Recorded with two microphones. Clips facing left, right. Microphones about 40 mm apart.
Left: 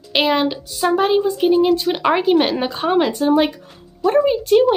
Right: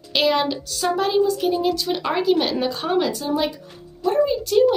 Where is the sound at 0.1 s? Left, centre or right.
Left.